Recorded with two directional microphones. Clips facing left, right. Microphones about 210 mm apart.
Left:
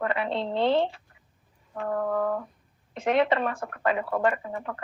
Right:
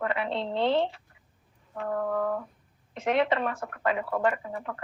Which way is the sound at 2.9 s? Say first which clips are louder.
Left 2 dB; 35° left (ahead or behind).